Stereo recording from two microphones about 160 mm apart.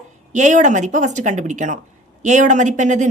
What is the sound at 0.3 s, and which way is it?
A woman's voice, 50° right (ahead or behind).